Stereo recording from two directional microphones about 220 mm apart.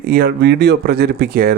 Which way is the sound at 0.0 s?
45° right (ahead or behind).